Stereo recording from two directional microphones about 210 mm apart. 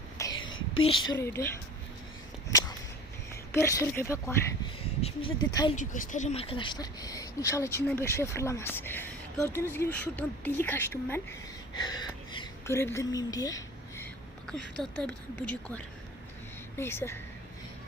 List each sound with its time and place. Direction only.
0.2 s whispering: 20° left (ahead or behind)
0.8 s speech: 25° left (ahead or behind)
3.5 s speech: 10° left (ahead or behind)
4.9 s speech: 25° left (ahead or behind)
5.7 s a woman's voice: 35° left (ahead or behind); by 17.2 s 10° left (ahead or behind)